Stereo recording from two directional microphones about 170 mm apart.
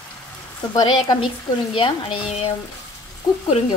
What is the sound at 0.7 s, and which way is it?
Speech, 20° left (ahead or behind).